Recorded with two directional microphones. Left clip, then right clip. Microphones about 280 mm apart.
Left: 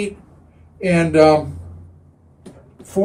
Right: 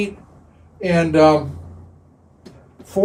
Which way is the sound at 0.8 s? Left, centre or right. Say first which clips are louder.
Left 1 dB; centre.